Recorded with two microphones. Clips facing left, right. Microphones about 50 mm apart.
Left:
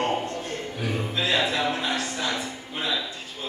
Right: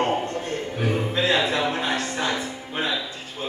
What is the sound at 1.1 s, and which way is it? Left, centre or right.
Speech, right.